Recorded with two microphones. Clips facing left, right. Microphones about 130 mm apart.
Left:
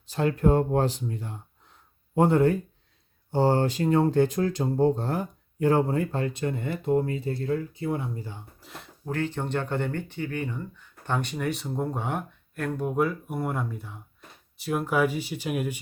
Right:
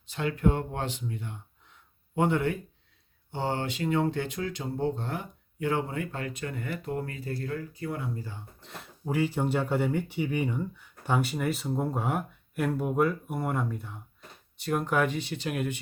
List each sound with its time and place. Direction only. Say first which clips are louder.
0.1 s speech: left 5 dB; 40° left (ahead or behind); by 8.4 s 20° left (ahead or behind)
8.6 s speech: right 1 dB; centre (ahead or behind)